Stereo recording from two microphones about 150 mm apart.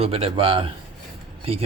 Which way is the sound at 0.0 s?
40° right (ahead or behind).